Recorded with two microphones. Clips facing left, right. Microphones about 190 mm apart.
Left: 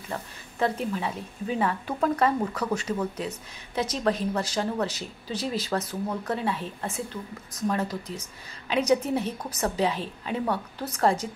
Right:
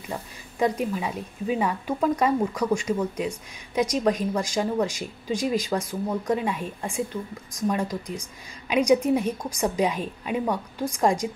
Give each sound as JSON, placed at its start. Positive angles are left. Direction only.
{"t": 0.1, "sound": "a woman's voice", "side_deg": -10}